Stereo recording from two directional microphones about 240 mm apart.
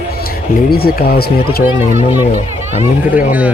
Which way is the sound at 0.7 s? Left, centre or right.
Left.